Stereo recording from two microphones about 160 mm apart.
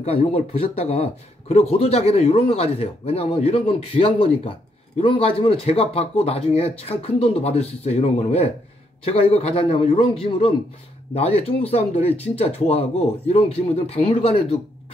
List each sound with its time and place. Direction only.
0.0 s speech: 40° left (ahead or behind)